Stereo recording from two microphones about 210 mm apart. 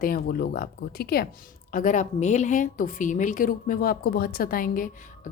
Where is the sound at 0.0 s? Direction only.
45° left (ahead or behind).